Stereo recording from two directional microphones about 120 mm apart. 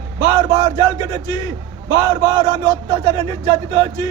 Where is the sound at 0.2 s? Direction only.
30° right (ahead or behind).